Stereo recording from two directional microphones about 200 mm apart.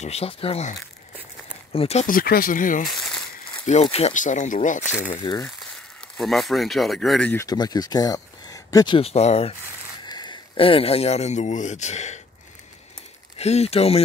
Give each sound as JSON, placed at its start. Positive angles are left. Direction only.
{"t": 0.0, "sound": "speech", "side_deg": 30}
{"t": 5.2, "sound": "speech", "side_deg": 25}
{"t": 6.1, "sound": "speech", "side_deg": 0}
{"t": 7.4, "sound": "speech", "side_deg": 20}
{"t": 10.0, "sound": "speech", "side_deg": 20}
{"t": 13.4, "sound": "speech", "side_deg": 30}